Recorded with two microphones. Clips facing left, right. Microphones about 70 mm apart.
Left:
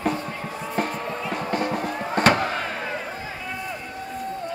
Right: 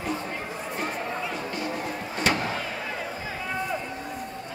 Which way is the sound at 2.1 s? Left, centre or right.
Left.